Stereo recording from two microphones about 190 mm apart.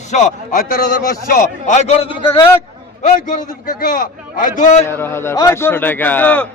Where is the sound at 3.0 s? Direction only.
40° left (ahead or behind).